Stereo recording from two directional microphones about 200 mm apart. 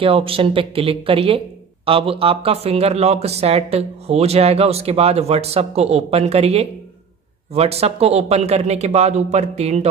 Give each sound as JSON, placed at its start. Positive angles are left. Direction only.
{"t": 0.0, "sound": "speech", "side_deg": -25}